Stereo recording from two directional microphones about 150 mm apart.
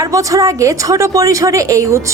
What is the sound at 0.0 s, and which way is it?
A woman's voice, 20° right (ahead or behind).